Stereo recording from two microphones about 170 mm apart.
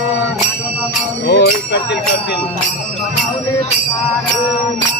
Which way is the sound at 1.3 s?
90° left.